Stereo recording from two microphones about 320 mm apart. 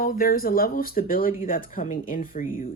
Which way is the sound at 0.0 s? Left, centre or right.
Left.